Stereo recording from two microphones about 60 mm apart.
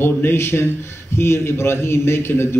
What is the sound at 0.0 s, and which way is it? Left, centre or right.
A man's voice, left.